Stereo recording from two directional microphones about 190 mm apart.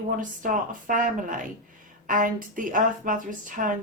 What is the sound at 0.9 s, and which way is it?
A woman's voice, 45° right (ahead or behind).